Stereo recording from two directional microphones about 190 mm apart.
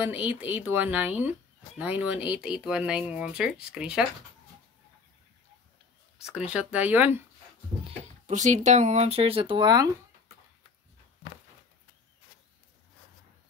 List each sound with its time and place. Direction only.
0.0 s speech: 10° right (ahead or behind)
6.2 s speech: 5° right (ahead or behind)
8.3 s speech: 40° right (ahead or behind); by 9.8 s 20° right (ahead or behind)